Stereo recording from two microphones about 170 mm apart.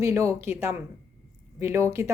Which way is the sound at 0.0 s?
15° right (ahead or behind).